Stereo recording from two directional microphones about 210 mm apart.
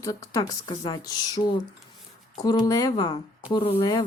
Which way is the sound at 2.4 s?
20° left (ahead or behind).